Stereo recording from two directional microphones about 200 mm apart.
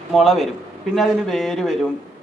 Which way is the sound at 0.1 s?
Centre (ahead or behind).